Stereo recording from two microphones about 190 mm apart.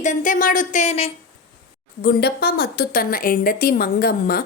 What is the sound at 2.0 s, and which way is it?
A woman's voice, 55° left (ahead or behind).